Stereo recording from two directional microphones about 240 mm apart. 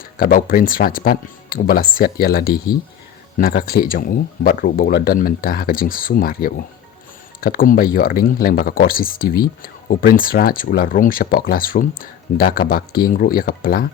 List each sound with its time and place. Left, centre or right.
0.0 s speech: left